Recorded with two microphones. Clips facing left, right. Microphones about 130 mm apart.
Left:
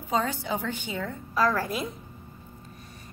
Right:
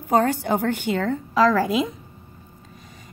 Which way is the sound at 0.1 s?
60° right (ahead or behind).